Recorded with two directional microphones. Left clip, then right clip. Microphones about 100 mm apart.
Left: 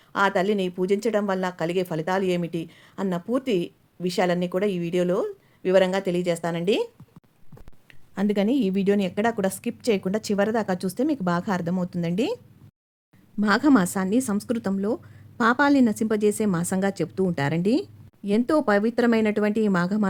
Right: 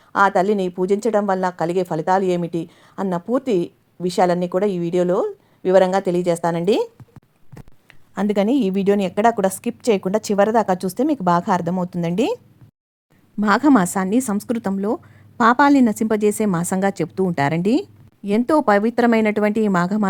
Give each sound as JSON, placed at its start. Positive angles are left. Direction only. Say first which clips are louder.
{"t": 0.1, "sound": "a woman's voice", "louder": "right 6 dB", "side_deg": -40}
{"t": 7.9, "sound": "a woman's voice", "louder": "right 4 dB", "side_deg": -60}
{"t": 13.4, "sound": "a woman's voice", "louder": "right 5 dB", "side_deg": -55}